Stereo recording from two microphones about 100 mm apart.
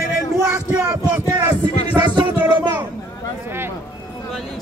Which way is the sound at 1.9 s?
50° right (ahead or behind).